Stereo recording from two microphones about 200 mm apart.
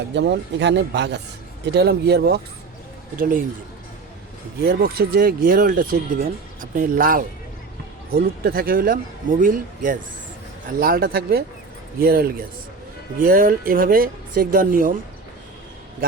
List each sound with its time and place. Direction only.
0.1 s speech: 60° right (ahead or behind)
3.2 s speech: 45° right (ahead or behind)
4.6 s speech: 50° right (ahead or behind)
13.2 s speech: 45° right (ahead or behind)